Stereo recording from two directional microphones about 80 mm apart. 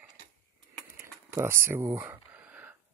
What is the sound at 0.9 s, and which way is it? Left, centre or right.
Speech, right.